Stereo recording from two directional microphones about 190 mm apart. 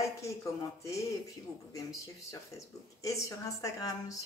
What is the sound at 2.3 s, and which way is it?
A woman's voice, 15° left (ahead or behind).